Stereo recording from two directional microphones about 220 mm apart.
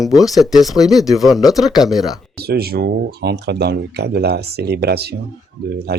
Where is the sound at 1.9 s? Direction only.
Centre (ahead or behind).